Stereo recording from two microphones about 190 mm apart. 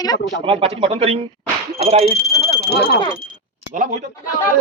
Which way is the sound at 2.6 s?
55° left (ahead or behind).